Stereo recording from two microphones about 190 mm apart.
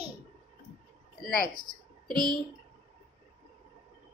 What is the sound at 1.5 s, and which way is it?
Speech, 20° right (ahead or behind).